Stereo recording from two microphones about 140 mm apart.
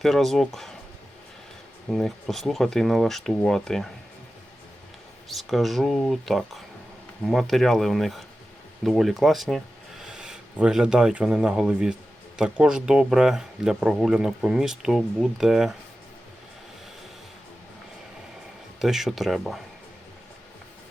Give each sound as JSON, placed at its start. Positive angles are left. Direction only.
{"t": 0.0, "sound": "speech", "side_deg": 0}
{"t": 1.9, "sound": "speech", "side_deg": 0}
{"t": 5.3, "sound": "speech", "side_deg": 0}
{"t": 18.8, "sound": "speech", "side_deg": 0}